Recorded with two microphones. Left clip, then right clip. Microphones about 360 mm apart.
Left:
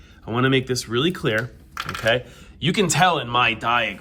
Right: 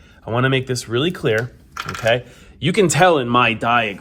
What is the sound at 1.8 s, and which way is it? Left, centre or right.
Speech, left.